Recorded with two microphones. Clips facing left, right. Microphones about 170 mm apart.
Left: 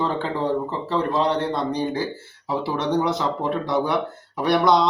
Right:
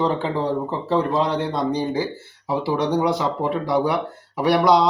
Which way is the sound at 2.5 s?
10° right (ahead or behind).